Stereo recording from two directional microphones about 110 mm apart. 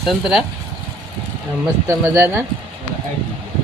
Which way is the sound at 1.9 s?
20° right (ahead or behind).